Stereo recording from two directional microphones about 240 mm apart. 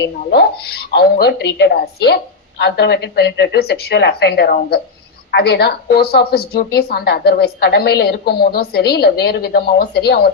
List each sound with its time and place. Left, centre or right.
0.0 s a woman's voice: left